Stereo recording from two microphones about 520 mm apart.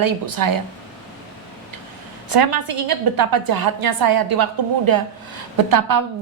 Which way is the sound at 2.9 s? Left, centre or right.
Right.